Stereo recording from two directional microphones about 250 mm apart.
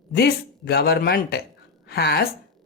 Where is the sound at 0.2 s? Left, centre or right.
Left.